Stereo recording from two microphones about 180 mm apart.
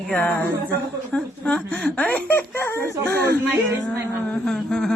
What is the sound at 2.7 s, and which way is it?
Speech, 15° right (ahead or behind).